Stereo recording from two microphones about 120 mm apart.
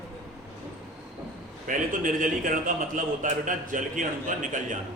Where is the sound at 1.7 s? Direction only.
90° right.